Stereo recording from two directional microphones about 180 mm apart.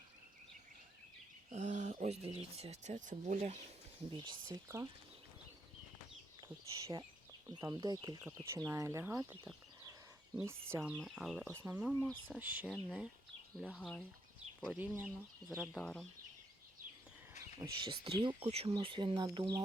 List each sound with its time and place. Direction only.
1.5 s speech: 40° right (ahead or behind)
4.1 s speech: 25° right (ahead or behind)
6.7 s speech: 20° right (ahead or behind)
10.9 s speech: 5° right (ahead or behind)
13.6 s speech: 5° left (ahead or behind)
14.6 s speech: 5° right (ahead or behind)
17.8 s speech: 25° right (ahead or behind)